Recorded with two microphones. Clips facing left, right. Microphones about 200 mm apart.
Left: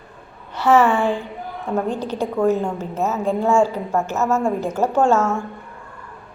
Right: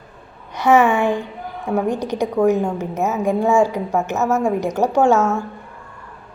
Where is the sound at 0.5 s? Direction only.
15° right (ahead or behind).